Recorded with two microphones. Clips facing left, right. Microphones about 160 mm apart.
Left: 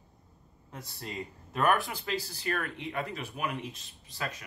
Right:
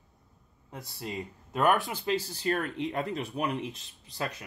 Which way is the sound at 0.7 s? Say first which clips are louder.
Right 3 dB; 15° right (ahead or behind).